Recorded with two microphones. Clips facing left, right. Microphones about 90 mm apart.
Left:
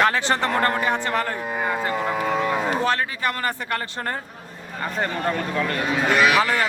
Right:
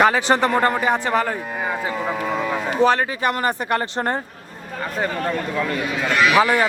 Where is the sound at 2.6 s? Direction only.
20° right (ahead or behind).